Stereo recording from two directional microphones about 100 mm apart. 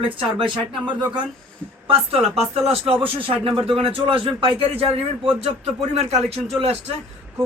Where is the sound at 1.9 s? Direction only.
80° right.